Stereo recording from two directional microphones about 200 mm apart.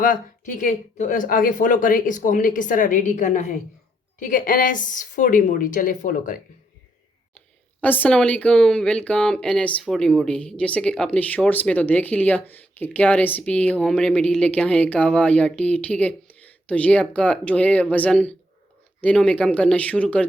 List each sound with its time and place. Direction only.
0.0 s speech: 40° left (ahead or behind)
7.8 s speech: 10° left (ahead or behind)